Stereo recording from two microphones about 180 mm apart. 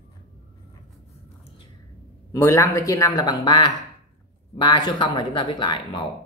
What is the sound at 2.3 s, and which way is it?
A man's voice, 15° left (ahead or behind).